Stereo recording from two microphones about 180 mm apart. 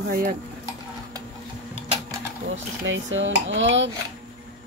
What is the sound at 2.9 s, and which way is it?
Dishes, 90° right.